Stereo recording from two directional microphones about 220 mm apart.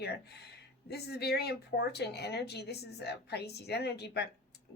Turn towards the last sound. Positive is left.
turn(degrees=50)  # may be behind; listen again after turning